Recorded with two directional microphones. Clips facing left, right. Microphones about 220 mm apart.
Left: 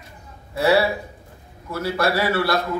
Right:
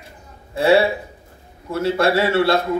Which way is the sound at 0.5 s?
25° right (ahead or behind).